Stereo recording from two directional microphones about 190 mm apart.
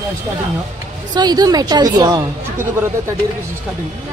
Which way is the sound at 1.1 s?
20° right (ahead or behind).